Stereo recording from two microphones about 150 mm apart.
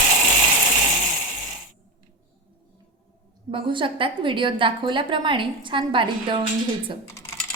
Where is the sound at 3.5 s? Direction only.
35° right (ahead or behind).